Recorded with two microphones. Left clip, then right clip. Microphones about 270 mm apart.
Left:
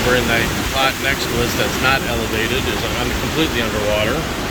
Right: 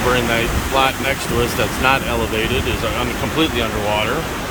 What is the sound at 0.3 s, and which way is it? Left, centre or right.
Speech, centre.